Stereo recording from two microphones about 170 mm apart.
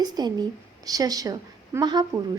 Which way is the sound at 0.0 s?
25° right (ahead or behind).